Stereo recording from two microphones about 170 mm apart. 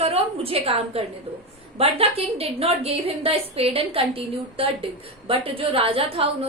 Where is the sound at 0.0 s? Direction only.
35° right (ahead or behind).